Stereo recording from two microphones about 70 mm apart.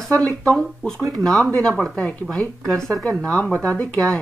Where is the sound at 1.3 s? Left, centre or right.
Left.